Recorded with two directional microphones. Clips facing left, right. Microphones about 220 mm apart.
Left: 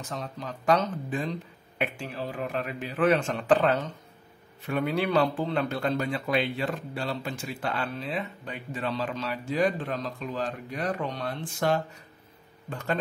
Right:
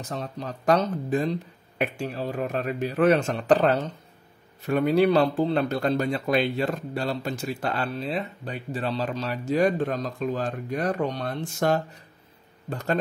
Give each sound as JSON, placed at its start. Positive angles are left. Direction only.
{"t": 0.0, "sound": "speech", "side_deg": -40}